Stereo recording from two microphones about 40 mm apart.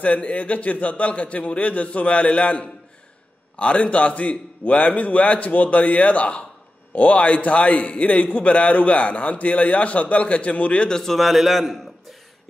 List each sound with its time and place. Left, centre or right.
0.0 s a man's voice: left
10.8 s a man's voice: centre
11.1 s a man's voice: centre